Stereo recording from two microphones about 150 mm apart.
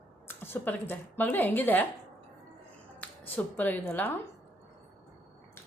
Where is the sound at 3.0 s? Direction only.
10° left (ahead or behind).